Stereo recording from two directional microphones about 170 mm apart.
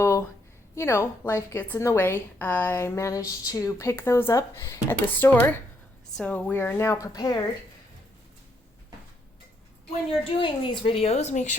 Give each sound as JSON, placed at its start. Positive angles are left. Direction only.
{"t": 0.0, "sound": "a sound", "side_deg": 15}
{"t": 0.8, "sound": "a woman's voice", "side_deg": 15}
{"t": 10.2, "sound": "a woman's voice", "side_deg": 30}